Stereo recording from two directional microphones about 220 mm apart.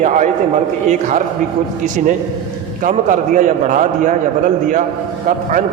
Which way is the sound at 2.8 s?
35° right (ahead or behind).